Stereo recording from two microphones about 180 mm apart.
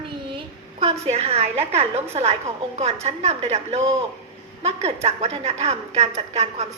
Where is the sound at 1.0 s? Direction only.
35° right (ahead or behind).